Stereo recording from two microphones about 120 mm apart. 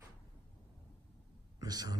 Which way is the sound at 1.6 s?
35° right (ahead or behind).